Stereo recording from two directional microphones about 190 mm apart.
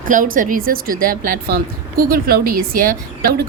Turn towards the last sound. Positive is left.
turn(degrees=-50)  # may be behind; listen again after turning